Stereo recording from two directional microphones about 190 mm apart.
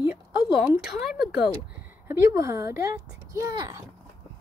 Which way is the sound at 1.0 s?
Centre (ahead or behind).